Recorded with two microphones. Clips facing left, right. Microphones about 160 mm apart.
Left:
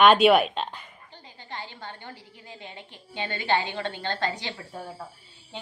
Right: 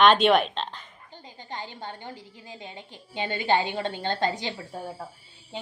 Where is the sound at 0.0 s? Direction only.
5° left (ahead or behind).